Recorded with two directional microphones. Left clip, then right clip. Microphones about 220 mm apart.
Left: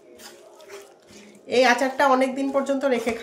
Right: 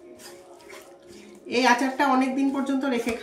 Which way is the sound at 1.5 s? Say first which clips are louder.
Left 3 dB; 50° left (ahead or behind).